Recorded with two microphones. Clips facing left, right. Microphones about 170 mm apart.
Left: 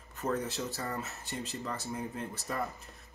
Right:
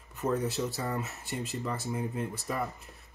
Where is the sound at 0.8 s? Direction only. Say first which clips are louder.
Right 3 dB; 15° right (ahead or behind).